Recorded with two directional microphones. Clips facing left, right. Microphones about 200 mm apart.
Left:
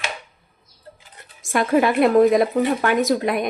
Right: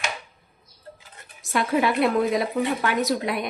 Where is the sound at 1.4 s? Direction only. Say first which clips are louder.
Left 4 dB; 50° left (ahead or behind).